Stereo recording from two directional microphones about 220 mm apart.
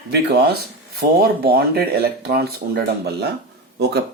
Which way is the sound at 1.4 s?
45° right (ahead or behind).